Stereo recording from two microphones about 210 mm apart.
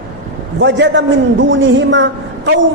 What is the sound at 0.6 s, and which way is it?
A man's voice, 60° right (ahead or behind).